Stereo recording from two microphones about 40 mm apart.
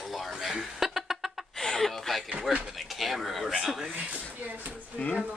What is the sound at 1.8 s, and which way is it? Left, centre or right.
Speech, centre.